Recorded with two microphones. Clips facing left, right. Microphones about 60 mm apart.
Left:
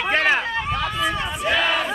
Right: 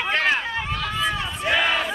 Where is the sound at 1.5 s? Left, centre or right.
Centre.